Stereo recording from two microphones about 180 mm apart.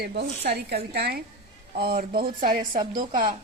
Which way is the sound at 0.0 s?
65° right (ahead or behind).